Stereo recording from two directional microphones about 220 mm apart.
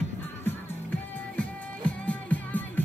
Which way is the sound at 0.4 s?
10° left (ahead or behind).